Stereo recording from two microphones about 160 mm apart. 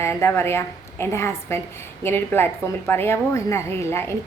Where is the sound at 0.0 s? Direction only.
15° left (ahead or behind).